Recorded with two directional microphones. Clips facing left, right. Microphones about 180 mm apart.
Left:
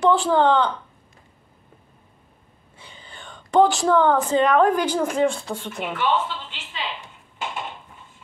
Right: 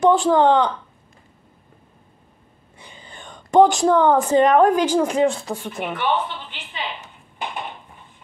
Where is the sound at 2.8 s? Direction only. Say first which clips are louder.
Right 2 dB; 15° right (ahead or behind).